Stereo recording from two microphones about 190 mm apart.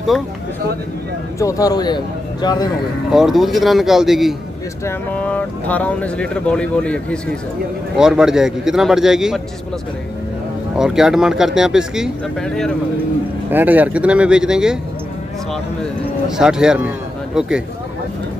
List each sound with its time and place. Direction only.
1.4 s speech: 20° left (ahead or behind)
3.1 s speech: centre (ahead or behind)
10.8 s speech: 5° right (ahead or behind)
13.5 s speech: 10° right (ahead or behind)
15.8 s speech: 5° right (ahead or behind)